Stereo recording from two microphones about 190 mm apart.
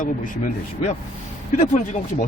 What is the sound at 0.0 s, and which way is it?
Speech, 45° left (ahead or behind).